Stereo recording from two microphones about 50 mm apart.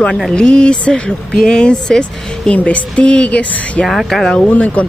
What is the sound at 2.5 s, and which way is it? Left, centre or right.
Speech, left.